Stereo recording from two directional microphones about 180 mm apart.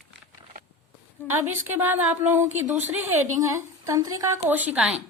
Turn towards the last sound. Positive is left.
turn(degrees=-5)  # may be behind; listen again after turning